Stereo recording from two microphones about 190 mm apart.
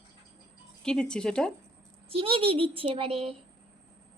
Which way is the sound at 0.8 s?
5° left (ahead or behind).